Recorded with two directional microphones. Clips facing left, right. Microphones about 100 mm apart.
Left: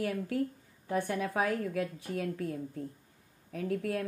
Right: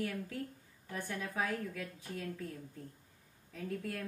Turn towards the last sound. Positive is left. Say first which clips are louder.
# left 7 dB
turn(degrees=65)  # may be behind; listen again after turning